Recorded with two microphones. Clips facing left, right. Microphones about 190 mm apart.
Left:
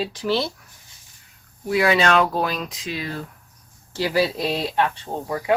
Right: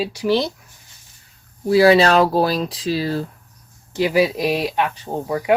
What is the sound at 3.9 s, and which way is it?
Speech, 15° right (ahead or behind).